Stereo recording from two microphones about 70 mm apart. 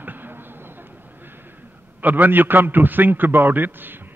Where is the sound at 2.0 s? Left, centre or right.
Right.